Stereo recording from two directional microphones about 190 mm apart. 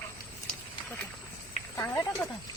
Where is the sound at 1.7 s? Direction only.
15° left (ahead or behind).